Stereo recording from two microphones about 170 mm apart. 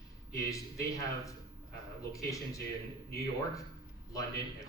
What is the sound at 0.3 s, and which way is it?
A man's voice, 20° left (ahead or behind).